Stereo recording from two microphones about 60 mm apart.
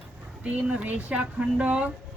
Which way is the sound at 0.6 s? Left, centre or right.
Centre.